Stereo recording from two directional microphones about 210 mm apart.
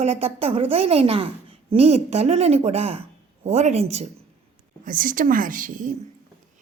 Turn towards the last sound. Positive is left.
turn(degrees=-40)  # may be behind; listen again after turning